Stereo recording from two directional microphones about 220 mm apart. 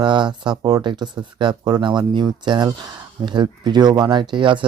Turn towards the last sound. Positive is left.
turn(degrees=-20)  # may be behind; listen again after turning